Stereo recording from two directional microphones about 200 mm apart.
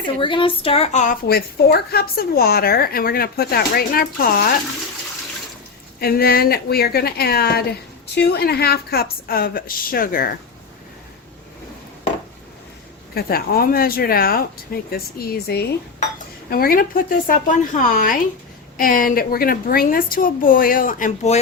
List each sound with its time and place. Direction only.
0.2 s female singing: 25° left (ahead or behind)
1.3 s speech: 50° left (ahead or behind)
6.0 s speech: 50° left (ahead or behind)
13.1 s speech: 50° left (ahead or behind)